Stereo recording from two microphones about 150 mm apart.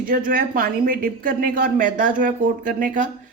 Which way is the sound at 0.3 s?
70° right (ahead or behind).